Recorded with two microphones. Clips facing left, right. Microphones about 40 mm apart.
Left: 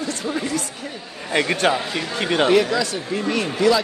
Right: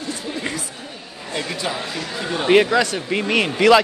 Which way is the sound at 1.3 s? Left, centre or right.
Left.